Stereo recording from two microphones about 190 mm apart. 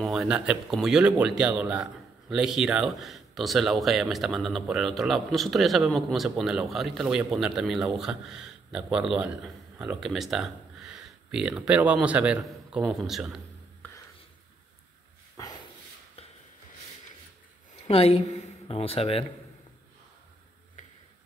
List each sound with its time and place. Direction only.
0.0 s speech: centre (ahead or behind)
16.2 s a sound: 30° left (ahead or behind)
17.8 s speech: 30° left (ahead or behind)